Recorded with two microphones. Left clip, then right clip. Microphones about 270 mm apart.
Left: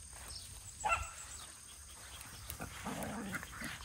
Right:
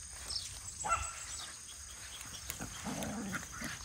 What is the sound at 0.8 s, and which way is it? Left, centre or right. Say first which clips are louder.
Dog: even; left.